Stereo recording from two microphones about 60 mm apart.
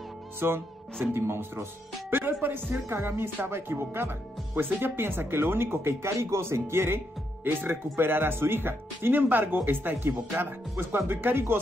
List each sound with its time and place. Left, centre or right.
0.4 s speech: right
6.1 s music: right
7.4 s speech: right